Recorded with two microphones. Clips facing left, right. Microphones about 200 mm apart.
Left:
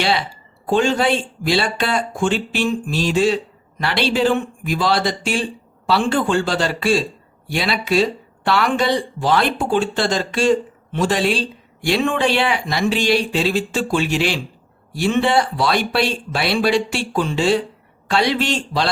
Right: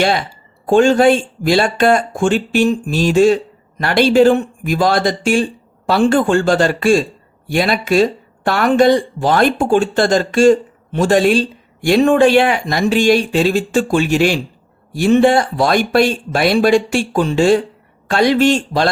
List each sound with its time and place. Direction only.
0.7 s speech: 45° right (ahead or behind)